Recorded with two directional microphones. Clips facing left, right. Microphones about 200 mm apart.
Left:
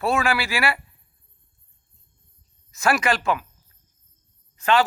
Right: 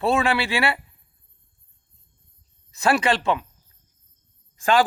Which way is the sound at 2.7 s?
30° right (ahead or behind).